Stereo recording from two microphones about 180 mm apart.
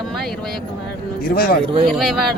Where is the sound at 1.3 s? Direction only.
55° left (ahead or behind).